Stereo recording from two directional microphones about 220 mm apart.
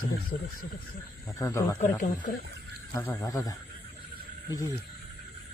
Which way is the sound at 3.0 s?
15° left (ahead or behind).